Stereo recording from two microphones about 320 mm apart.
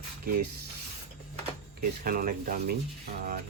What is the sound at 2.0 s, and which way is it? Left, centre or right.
Speech, right.